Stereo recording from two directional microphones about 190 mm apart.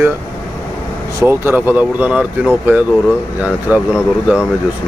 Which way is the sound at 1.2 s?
10° right (ahead or behind).